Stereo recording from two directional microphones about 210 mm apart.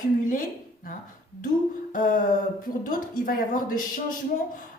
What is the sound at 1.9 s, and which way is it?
A woman's voice, 40° left (ahead or behind).